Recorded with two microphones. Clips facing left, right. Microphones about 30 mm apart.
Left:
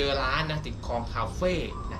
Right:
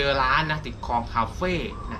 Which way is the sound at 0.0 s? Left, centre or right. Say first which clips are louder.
Right 5 dB; centre.